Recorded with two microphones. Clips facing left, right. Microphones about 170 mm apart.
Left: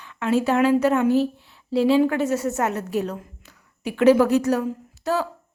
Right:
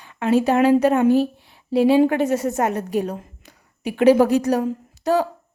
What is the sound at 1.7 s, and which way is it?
A woman's voice, 15° right (ahead or behind).